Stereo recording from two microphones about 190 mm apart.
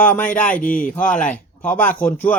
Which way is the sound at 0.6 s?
45° left (ahead or behind).